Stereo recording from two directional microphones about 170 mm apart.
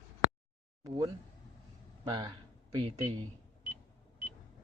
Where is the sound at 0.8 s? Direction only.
25° right (ahead or behind).